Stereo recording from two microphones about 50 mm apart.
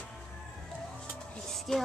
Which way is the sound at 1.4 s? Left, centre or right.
Centre.